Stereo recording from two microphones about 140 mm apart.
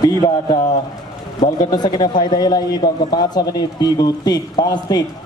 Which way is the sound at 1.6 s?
30° left (ahead or behind).